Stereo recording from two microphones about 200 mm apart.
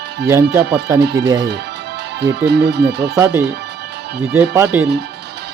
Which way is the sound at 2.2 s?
55° right (ahead or behind).